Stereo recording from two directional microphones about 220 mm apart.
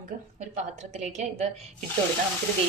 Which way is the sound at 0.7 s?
30° right (ahead or behind).